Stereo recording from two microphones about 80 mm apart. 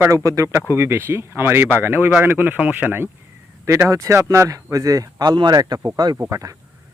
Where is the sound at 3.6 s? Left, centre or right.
Right.